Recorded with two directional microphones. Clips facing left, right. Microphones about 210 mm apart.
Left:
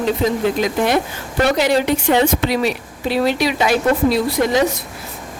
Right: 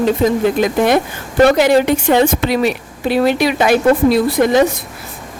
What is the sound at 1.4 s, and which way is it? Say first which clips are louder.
A woman's voice: right 4 dB; 50° right (ahead or behind).